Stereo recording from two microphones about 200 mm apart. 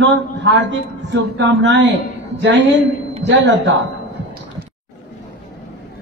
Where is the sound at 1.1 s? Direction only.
60° right (ahead or behind).